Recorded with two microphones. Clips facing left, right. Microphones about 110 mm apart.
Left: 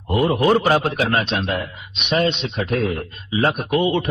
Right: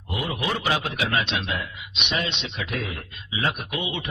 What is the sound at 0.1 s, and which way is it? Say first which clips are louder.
A man's voice: left 12 dB; 45° left (ahead or behind).